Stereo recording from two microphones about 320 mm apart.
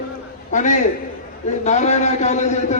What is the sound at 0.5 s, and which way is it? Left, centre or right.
A man's voice, left.